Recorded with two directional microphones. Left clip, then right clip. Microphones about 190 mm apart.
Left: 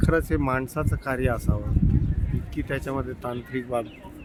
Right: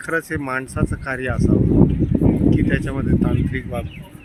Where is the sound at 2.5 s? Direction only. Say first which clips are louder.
Right 8 dB; 10° left (ahead or behind).